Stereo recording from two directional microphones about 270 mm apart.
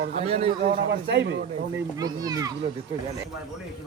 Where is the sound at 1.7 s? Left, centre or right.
Centre.